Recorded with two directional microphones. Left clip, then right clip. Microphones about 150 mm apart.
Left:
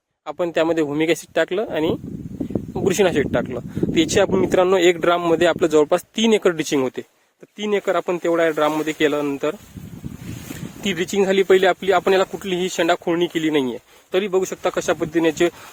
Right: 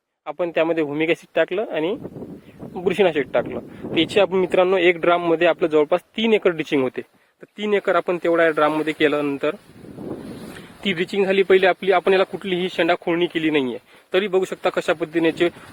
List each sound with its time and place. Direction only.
0.3 s a man's voice: 50° left (ahead or behind)
7.6 s speech: 20° left (ahead or behind)
10.8 s speech: 55° left (ahead or behind)
14.1 s speech: 30° left (ahead or behind); by 15.5 s 60° left (ahead or behind)